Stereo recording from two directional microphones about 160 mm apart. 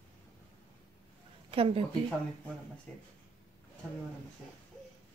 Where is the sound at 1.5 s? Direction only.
35° right (ahead or behind).